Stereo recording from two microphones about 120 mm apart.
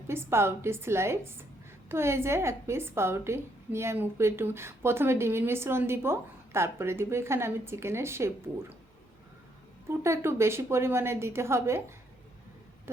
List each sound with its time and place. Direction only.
0.1 s a woman's voice: 20° right (ahead or behind)
9.9 s a woman's voice: 20° right (ahead or behind)